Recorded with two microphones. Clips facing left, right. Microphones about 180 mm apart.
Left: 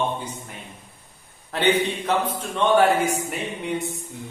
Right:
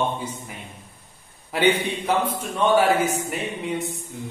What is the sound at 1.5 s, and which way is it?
A man's voice, 10° right (ahead or behind).